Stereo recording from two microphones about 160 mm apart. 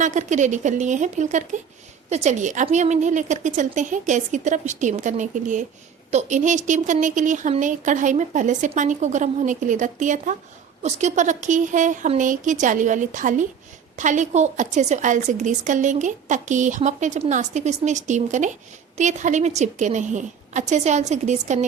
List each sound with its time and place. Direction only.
0.0 s a woman's voice: 50° right (ahead or behind)